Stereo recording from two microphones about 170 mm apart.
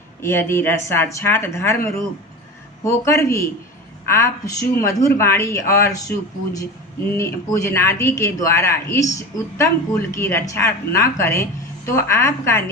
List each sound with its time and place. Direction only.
0.2 s speech: 15° left (ahead or behind)